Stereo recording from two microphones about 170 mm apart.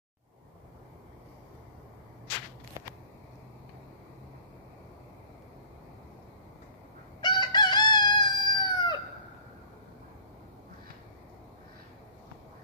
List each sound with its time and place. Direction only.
7.2 s crowing: 25° left (ahead or behind)